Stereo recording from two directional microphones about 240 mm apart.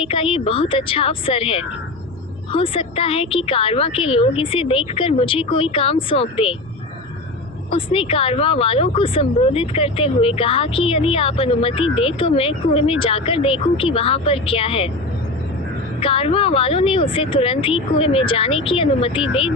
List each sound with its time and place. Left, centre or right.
0.0 s speech: left
7.7 s speech: left
16.0 s speech: left